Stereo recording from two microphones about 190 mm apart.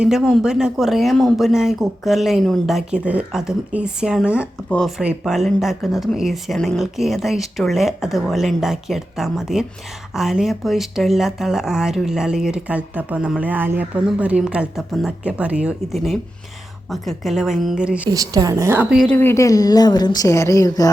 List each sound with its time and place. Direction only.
0.0 s speech: 5° right (ahead or behind)
18.1 s a woman's voice: 20° right (ahead or behind); by 20.9 s 20° left (ahead or behind)